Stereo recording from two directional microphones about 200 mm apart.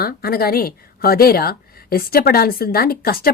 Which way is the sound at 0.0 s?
50° left (ahead or behind).